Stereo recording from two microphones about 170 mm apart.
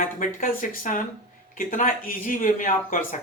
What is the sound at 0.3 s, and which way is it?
Speech, 55° left (ahead or behind).